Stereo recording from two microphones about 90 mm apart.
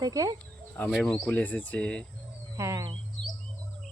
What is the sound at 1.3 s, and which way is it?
Speech, 20° left (ahead or behind).